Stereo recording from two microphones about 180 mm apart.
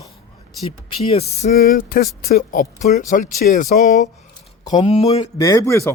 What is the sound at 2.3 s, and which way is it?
Speech, 45° left (ahead or behind).